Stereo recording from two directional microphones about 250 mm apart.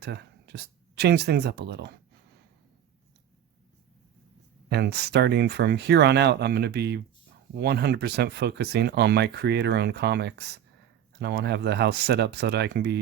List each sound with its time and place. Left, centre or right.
0.0 s speech: right
4.7 s speech: right